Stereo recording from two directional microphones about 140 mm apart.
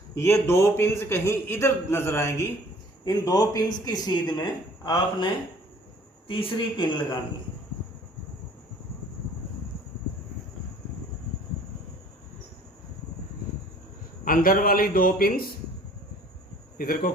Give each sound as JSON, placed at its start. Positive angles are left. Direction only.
{"t": 0.1, "sound": "a man's voice", "side_deg": 20}
{"t": 14.3, "sound": "speech", "side_deg": 90}
{"t": 16.7, "sound": "speech", "side_deg": 90}